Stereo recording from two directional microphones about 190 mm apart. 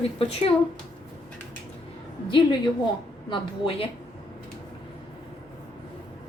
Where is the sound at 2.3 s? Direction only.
25° left (ahead or behind).